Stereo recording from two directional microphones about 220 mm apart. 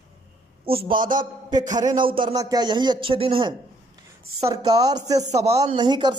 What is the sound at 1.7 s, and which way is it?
A man's voice, 15° right (ahead or behind).